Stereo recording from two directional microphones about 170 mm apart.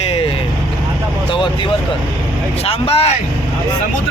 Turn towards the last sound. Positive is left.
turn(degrees=35)  # may be behind; listen again after turning